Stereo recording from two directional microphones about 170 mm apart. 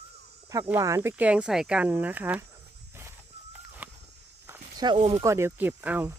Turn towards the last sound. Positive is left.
turn(degrees=-10)  # may be behind; listen again after turning